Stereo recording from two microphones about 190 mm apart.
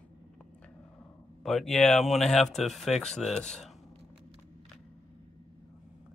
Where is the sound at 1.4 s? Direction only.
Centre (ahead or behind).